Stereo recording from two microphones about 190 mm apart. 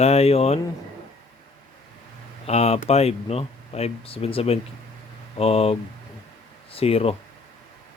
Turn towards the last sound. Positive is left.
turn(degrees=30)  # may be behind; listen again after turning